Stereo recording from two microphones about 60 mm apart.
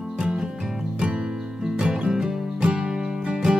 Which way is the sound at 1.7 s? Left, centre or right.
Centre.